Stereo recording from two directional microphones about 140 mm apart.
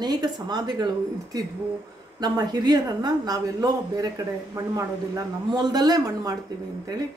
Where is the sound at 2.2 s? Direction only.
30° right (ahead or behind).